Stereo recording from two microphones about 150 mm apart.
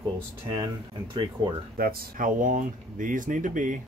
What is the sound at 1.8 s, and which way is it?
Speech, 75° right (ahead or behind).